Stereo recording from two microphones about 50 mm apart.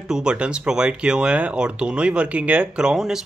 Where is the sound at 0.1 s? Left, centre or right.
Centre.